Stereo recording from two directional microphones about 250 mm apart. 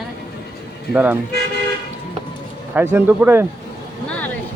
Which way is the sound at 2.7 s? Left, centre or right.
Centre.